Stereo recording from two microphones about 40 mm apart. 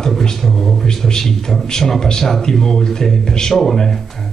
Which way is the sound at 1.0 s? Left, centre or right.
Centre.